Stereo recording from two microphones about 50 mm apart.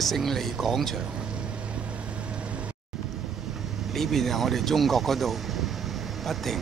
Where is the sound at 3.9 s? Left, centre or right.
Centre.